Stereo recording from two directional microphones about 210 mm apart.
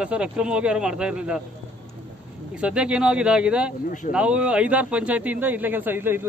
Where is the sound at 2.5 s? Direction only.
5° right (ahead or behind).